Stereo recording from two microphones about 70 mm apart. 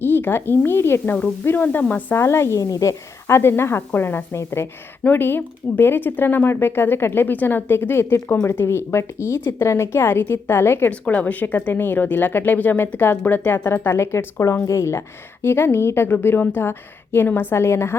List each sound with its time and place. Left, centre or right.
0.0 s a woman's voice: left
2.1 s a woman's voice: left
2.6 s a woman's voice: left
3.2 s a woman's voice: left
11.0 s a woman's voice: left